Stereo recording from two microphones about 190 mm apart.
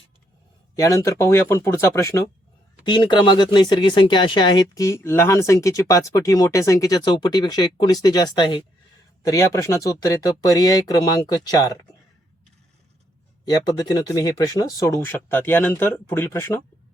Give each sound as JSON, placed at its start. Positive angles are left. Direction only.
{"t": 0.8, "sound": "speech", "side_deg": 15}
{"t": 13.4, "sound": "speech", "side_deg": 20}